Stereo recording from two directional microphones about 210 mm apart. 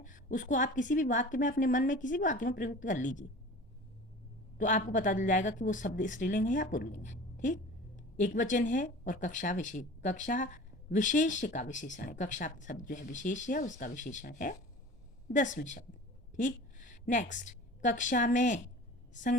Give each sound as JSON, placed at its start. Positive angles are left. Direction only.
{"t": 0.0, "sound": "speech", "side_deg": 40}
{"t": 4.5, "sound": "a woman's voice", "side_deg": 35}